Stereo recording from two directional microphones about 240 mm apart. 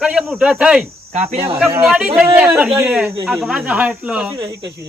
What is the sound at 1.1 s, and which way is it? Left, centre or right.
Speech, right.